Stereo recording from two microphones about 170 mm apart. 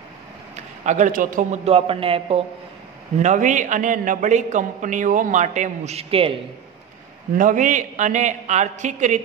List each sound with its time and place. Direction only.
0.6 s a man's voice: 45° right (ahead or behind)
3.2 s a man's voice: 45° right (ahead or behind)
7.3 s a man's voice: 50° right (ahead or behind)